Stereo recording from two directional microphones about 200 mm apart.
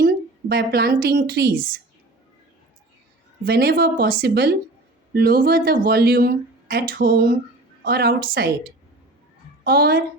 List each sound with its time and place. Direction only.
0.0 s a woman's voice: 50° right (ahead or behind)
3.4 s speech: 50° right (ahead or behind)
9.6 s speech: 50° right (ahead or behind)